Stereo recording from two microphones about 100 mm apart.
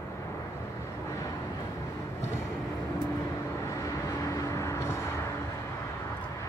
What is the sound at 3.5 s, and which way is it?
Vehicle, 30° left (ahead or behind).